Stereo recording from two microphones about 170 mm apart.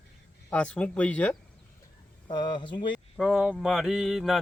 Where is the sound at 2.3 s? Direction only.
25° left (ahead or behind).